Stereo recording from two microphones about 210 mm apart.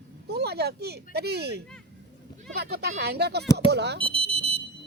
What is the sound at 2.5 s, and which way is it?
Speech, 50° right (ahead or behind).